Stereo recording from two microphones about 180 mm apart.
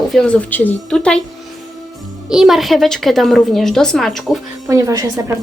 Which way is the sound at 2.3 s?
Centre (ahead or behind).